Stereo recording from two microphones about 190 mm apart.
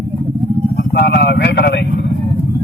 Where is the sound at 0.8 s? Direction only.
55° left (ahead or behind).